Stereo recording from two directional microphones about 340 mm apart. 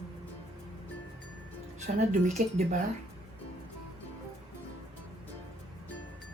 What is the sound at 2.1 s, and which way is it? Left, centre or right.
Speech, centre.